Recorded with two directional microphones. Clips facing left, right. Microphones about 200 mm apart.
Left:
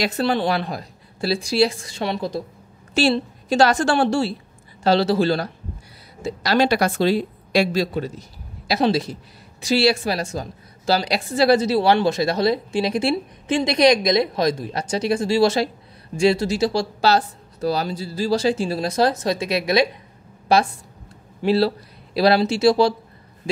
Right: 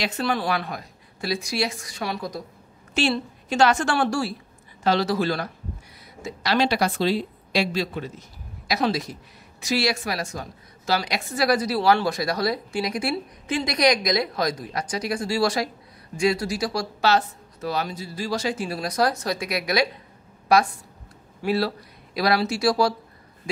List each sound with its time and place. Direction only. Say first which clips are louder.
0.0 s a woman's voice: left 5 dB; 35° left (ahead or behind)
6.2 s a woman's voice: left 4 dB; 40° left (ahead or behind); by 22.9 s 25° left (ahead or behind)